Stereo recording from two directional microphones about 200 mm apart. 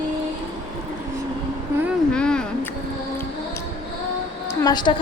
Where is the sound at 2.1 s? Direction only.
5° left (ahead or behind).